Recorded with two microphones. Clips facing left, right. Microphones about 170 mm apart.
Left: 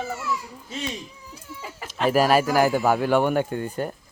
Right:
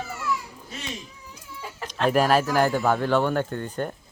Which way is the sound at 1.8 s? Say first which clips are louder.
Left 1 dB; 5° left (ahead or behind).